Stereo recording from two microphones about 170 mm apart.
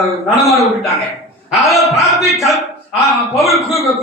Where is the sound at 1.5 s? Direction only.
Centre (ahead or behind).